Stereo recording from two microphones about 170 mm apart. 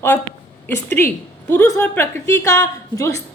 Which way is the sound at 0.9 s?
15° left (ahead or behind).